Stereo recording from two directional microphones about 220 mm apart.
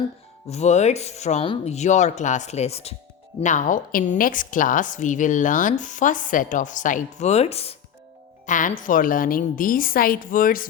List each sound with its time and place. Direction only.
0.4 s a woman's voice: 30° left (ahead or behind)